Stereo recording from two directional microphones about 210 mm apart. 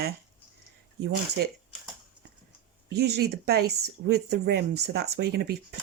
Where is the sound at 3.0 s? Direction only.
50° right (ahead or behind).